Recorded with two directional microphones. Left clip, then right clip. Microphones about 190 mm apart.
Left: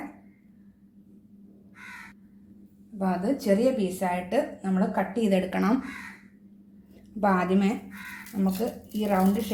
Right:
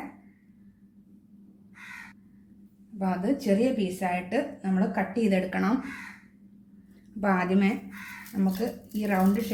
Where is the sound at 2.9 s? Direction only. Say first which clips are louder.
Left 1 dB; 15° left (ahead or behind).